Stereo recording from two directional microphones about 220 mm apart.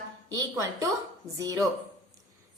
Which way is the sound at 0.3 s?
15° right (ahead or behind).